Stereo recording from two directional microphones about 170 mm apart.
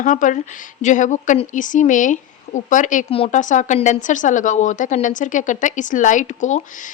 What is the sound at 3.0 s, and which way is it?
Speech, 35° left (ahead or behind).